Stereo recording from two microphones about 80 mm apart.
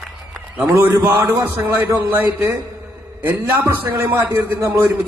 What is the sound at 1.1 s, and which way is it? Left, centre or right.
Speech, right.